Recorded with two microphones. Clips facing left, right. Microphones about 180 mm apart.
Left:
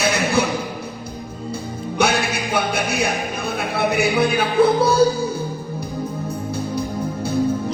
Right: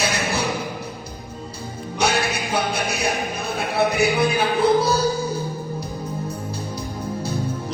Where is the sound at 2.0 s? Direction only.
55° left (ahead or behind).